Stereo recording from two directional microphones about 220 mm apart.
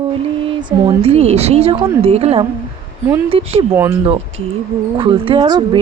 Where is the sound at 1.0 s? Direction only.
30° right (ahead or behind).